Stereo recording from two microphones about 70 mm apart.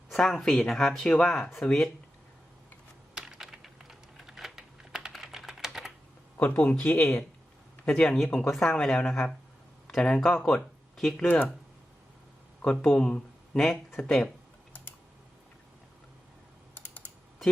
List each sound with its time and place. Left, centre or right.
0.1 s speech: centre
3.2 s typing: centre
6.3 s speech: left
11.2 s speech: left
12.8 s speech: centre
16.7 s typing: left